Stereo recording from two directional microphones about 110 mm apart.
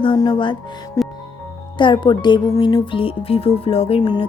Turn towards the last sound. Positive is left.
turn(degrees=45)  # may be behind; listen again after turning